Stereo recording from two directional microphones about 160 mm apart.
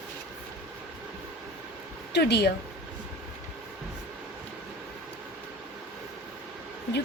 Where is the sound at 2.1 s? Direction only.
90° left.